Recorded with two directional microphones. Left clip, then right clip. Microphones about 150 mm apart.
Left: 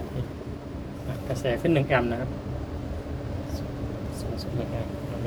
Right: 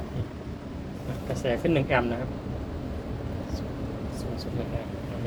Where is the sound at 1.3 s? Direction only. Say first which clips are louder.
Left 1 dB; 10° left (ahead or behind).